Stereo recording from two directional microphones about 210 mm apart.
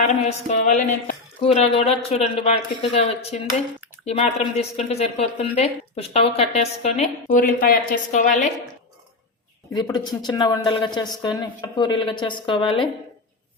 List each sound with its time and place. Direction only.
0.0 s speech: 35° left (ahead or behind)
9.7 s a woman's voice: 20° left (ahead or behind)